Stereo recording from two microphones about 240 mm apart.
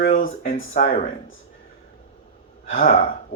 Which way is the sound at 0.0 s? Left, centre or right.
Left.